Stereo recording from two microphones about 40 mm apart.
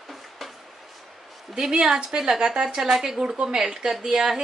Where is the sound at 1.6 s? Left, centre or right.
Centre.